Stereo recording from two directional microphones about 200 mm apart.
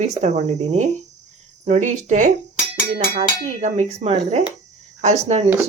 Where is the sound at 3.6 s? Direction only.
35° right (ahead or behind).